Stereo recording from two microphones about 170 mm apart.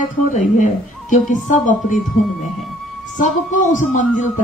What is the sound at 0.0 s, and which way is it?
Speech, 50° left (ahead or behind).